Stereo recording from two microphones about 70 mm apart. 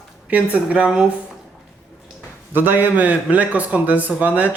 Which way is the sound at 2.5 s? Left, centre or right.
Right.